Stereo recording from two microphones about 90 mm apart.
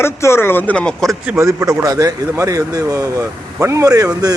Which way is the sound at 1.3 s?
35° right (ahead or behind).